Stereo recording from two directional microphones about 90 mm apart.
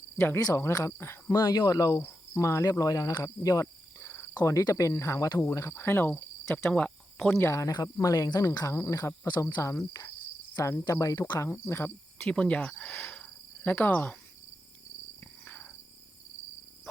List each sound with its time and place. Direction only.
0.2 s cricket: 30° left (ahead or behind)
1.3 s speech: 45° left (ahead or behind)
2.0 s cricket: 30° left (ahead or behind)
4.4 s cricket: 40° left (ahead or behind); by 7.3 s 15° left (ahead or behind)
7.3 s cricket: 35° left (ahead or behind)
12.3 s speech: 10° left (ahead or behind)
13.7 s cricket: 20° left (ahead or behind)
15.2 s cricket: 20° left (ahead or behind)